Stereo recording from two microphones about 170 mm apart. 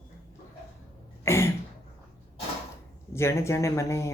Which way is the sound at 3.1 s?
15° left (ahead or behind).